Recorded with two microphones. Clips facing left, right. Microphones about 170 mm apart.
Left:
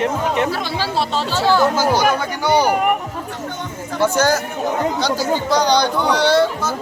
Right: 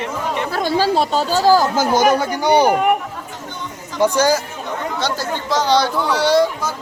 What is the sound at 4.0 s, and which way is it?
Speech, 10° right (ahead or behind).